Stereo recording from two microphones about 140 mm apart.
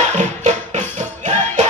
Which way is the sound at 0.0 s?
60° right (ahead or behind).